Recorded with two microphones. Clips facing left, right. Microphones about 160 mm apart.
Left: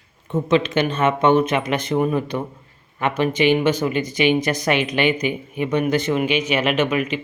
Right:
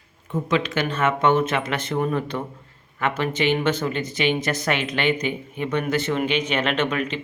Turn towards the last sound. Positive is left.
turn(degrees=10)  # may be behind; listen again after turning